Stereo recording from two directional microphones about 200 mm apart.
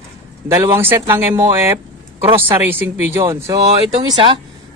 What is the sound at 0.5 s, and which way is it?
Speech, 15° right (ahead or behind).